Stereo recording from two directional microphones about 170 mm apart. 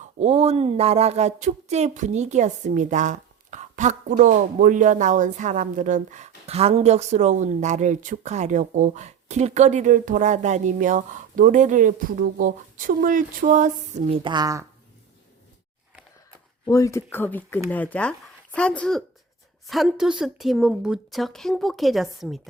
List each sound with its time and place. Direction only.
0.0 s speech: 40° right (ahead or behind)
14.1 s a woman's voice: 30° right (ahead or behind)
16.6 s speech: 20° left (ahead or behind); by 22.4 s centre (ahead or behind)